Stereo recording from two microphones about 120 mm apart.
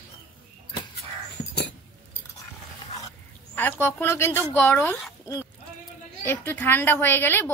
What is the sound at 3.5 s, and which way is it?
A woman's voice, 15° left (ahead or behind).